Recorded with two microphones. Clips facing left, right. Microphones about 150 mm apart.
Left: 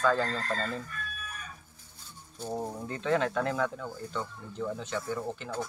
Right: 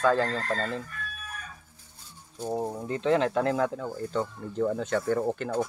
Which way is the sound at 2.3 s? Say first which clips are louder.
Right 4 dB; 15° right (ahead or behind).